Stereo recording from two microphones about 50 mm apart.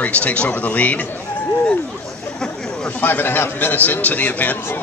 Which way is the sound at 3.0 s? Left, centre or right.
Left.